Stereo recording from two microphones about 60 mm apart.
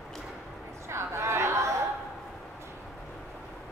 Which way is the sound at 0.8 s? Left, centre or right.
Right.